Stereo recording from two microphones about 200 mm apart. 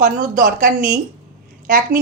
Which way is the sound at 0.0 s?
45° right (ahead or behind).